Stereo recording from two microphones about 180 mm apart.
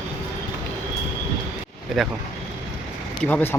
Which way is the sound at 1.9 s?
Centre (ahead or behind).